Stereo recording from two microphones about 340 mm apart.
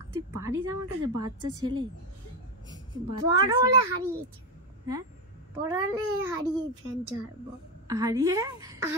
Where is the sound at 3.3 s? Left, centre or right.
Centre.